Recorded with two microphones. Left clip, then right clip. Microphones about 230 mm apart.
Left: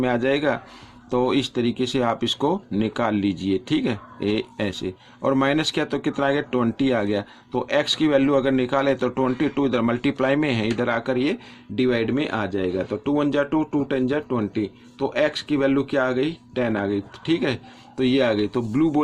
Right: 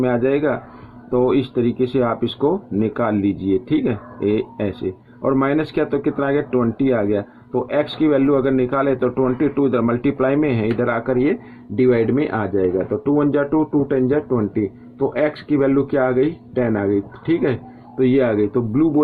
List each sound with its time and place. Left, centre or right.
0.0 s speech: left